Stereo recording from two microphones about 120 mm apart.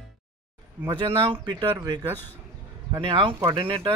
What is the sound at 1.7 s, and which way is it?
Speech, 35° right (ahead or behind).